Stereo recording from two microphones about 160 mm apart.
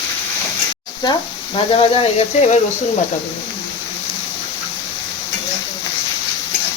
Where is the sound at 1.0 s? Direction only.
30° left (ahead or behind).